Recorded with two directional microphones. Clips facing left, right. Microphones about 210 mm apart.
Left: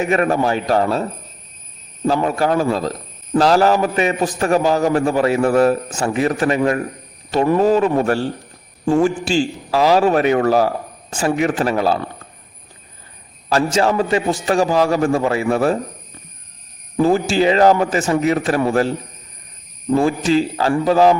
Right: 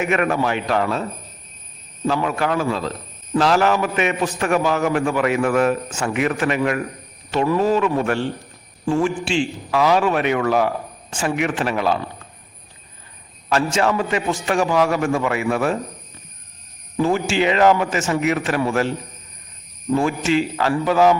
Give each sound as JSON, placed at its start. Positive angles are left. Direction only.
{"t": 0.0, "sound": "a man's voice", "side_deg": 35}
{"t": 2.0, "sound": "a man's voice", "side_deg": 35}
{"t": 13.5, "sound": "a man's voice", "side_deg": 35}
{"t": 17.0, "sound": "a man's voice", "side_deg": 35}